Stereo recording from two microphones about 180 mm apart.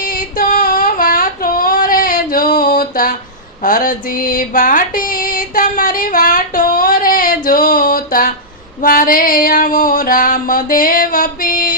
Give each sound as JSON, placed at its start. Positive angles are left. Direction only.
{"t": 0.0, "sound": "child singing", "side_deg": 50}
{"t": 3.6, "sound": "music", "side_deg": 50}
{"t": 8.8, "sound": "a sound", "side_deg": 50}